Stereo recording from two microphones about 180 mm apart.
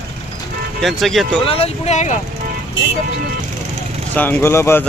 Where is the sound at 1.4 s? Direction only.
30° left (ahead or behind).